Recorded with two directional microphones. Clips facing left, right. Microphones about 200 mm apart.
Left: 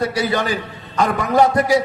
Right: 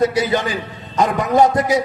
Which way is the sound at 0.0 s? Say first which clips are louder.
Right 3 dB; 20° right (ahead or behind).